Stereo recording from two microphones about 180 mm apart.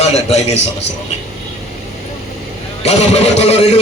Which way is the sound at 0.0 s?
35° left (ahead or behind).